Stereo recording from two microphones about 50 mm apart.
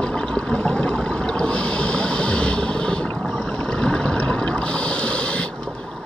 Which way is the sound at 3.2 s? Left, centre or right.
Centre.